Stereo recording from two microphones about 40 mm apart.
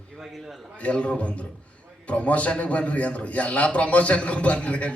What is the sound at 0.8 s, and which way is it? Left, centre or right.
A man's voice, left.